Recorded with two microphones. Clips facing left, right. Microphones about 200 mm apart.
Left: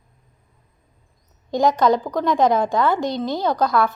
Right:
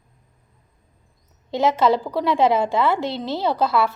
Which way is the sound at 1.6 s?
5° right (ahead or behind).